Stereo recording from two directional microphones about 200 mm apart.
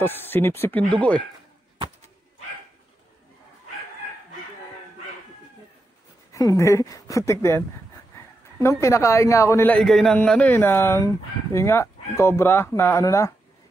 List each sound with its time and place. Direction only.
0.0 s a man's voice: 10° left (ahead or behind)
6.3 s a man's voice: 15° left (ahead or behind)